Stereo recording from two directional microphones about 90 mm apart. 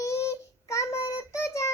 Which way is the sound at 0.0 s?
30° left (ahead or behind).